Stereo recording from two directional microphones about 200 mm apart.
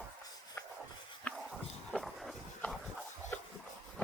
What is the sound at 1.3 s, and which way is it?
Dog, centre (ahead or behind).